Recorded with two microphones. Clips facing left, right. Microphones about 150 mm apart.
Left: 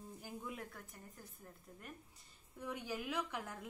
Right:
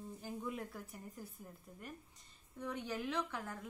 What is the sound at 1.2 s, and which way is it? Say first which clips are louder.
Speech: right 9 dB; 10° right (ahead or behind).